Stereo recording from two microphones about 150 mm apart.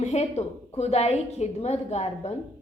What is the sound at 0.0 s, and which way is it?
A woman's voice, 45° left (ahead or behind).